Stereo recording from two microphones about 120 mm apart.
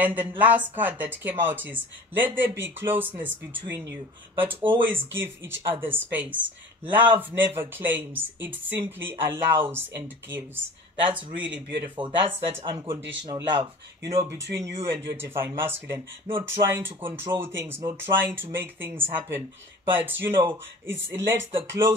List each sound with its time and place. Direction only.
0.0 s speech: 15° right (ahead or behind)
12.0 s speech: 45° right (ahead or behind)
12.8 s speech: 25° right (ahead or behind)
13.4 s speech: 40° right (ahead or behind)
14.1 s speech: 25° right (ahead or behind)